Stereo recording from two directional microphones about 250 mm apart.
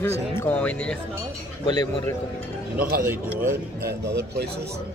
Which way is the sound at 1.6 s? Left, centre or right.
Centre.